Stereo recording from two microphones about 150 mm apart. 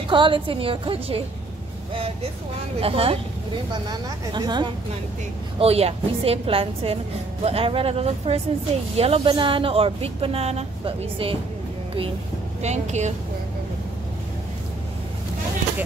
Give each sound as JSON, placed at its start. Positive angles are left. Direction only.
{"t": 0.1, "sound": "a woman's voice", "side_deg": -35}
{"t": 2.8, "sound": "a woman's voice", "side_deg": -40}
{"t": 4.3, "sound": "speech", "side_deg": -30}
{"t": 5.6, "sound": "a woman's voice", "side_deg": -40}
{"t": 12.6, "sound": "speech", "side_deg": -50}